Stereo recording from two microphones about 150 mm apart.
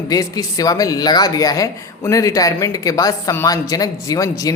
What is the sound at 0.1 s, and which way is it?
Speech, 25° left (ahead or behind).